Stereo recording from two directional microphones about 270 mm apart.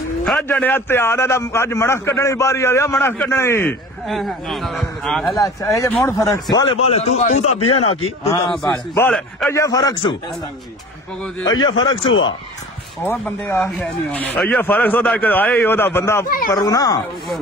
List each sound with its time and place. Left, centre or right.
0.2 s a man's voice: centre
5.4 s a man's voice: centre
7.5 s speech: left
7.8 s a man's voice: left
8.6 s a man's voice: centre
11.6 s a man's voice: centre
13.0 s a man's voice: centre